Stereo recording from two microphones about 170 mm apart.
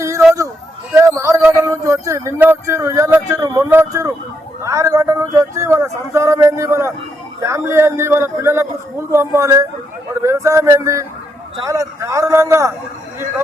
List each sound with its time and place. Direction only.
0.9 s speech: 20° right (ahead or behind)
4.6 s a sound: 20° right (ahead or behind)
7.4 s a man's voice: 15° right (ahead or behind)